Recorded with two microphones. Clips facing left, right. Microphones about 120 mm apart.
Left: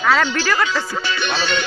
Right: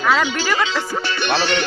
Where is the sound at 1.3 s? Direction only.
60° right (ahead or behind).